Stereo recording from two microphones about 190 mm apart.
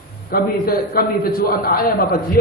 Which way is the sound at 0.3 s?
50° left (ahead or behind).